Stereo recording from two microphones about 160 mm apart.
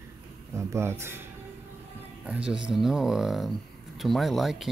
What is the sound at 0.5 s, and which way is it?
Speech, 15° right (ahead or behind).